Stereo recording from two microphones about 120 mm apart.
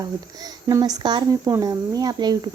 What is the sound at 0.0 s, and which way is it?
Speech, 35° right (ahead or behind).